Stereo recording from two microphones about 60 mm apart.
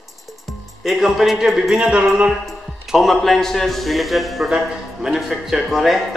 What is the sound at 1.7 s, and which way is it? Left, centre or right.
Speech, centre.